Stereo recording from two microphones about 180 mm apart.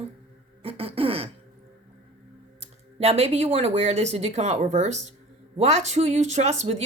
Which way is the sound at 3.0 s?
35° right (ahead or behind).